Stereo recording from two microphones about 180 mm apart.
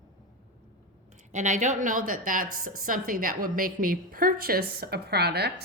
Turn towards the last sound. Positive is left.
turn(degrees=-65)  # may be behind; listen again after turning